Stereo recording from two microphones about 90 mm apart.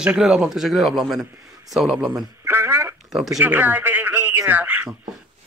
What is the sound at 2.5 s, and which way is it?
Speech, 25° right (ahead or behind).